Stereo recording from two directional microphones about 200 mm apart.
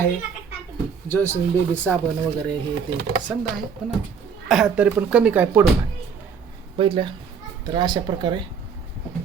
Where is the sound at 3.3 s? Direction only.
10° right (ahead or behind).